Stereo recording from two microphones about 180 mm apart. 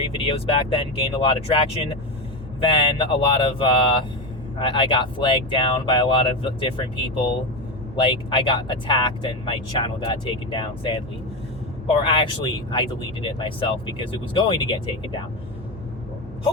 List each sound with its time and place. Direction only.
0.3 s speech: 30° left (ahead or behind)